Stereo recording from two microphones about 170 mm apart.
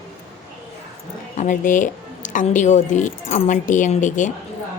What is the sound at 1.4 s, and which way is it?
Speech, 50° left (ahead or behind).